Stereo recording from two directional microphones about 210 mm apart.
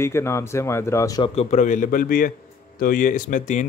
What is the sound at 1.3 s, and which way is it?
Speech, 30° left (ahead or behind).